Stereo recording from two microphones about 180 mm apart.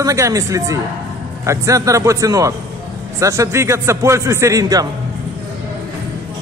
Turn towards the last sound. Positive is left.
turn(degrees=-20)  # may be behind; listen again after turning